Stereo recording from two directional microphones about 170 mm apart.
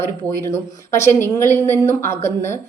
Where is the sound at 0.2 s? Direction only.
10° left (ahead or behind).